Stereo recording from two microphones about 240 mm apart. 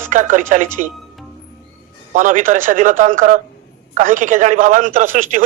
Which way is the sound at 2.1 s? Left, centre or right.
Right.